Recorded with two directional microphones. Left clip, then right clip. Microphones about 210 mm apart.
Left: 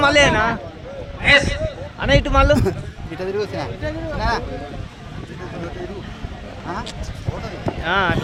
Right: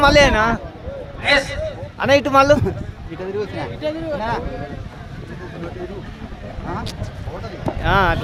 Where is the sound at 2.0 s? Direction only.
25° right (ahead or behind).